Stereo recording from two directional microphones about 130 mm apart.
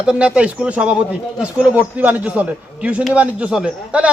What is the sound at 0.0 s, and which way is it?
Speech, 5° right (ahead or behind).